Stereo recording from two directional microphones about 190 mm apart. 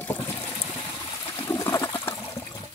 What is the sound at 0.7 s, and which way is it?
Water, 15° left (ahead or behind).